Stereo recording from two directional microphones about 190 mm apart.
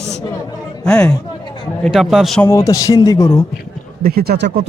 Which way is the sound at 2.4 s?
15° left (ahead or behind).